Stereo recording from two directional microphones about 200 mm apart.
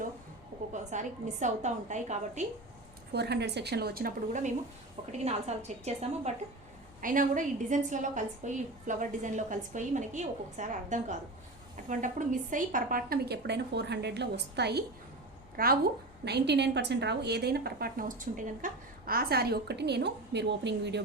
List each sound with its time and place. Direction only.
0.7 s a woman's voice: 35° right (ahead or behind)
3.1 s a woman's voice: 55° right (ahead or behind)